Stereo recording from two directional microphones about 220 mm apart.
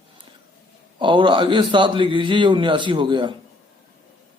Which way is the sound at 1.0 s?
20° right (ahead or behind).